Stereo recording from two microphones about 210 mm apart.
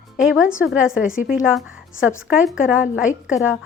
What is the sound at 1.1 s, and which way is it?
Speech, 40° left (ahead or behind).